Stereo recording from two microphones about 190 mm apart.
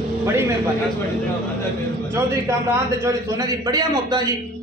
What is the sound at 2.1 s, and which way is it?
A man's voice, 15° right (ahead or behind).